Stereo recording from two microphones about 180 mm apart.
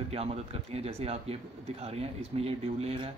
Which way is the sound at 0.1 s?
35° right (ahead or behind).